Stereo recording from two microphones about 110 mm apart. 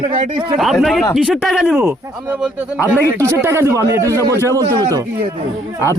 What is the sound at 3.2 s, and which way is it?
Speech, 25° right (ahead or behind).